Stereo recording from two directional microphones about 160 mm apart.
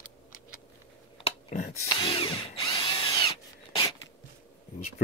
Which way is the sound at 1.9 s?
30° left (ahead or behind).